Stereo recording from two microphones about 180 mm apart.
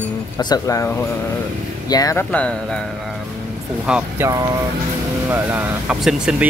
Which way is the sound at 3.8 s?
5° right (ahead or behind).